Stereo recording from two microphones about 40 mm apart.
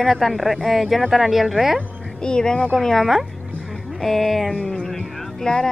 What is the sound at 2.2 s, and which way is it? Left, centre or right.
Speech, centre.